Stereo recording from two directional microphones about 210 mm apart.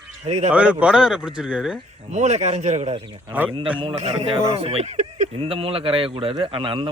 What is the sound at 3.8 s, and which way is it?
Speech, 25° right (ahead or behind).